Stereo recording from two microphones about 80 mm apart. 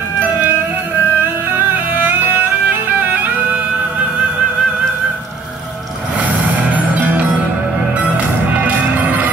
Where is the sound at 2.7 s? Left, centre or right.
Right.